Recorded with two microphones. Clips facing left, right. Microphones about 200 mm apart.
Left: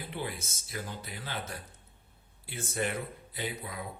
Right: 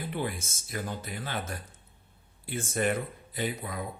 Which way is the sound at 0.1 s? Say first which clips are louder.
Right 3 dB; 50° right (ahead or behind).